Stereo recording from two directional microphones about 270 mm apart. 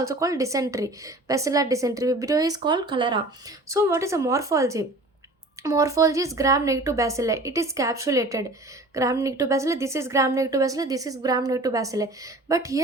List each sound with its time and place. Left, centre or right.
0.0 s a woman's voice: centre